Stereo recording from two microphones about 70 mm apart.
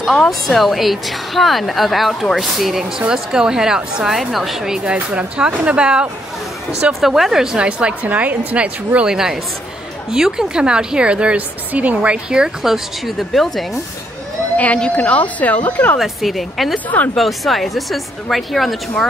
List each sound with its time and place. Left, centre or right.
0.2 s a woman's voice: centre
4.9 s a woman's voice: centre
9.1 s a woman's voice: centre
14.6 s a woman's voice: centre
16.0 s a woman's voice: centre